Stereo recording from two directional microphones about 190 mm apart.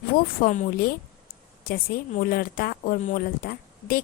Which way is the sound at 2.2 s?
50° left (ahead or behind).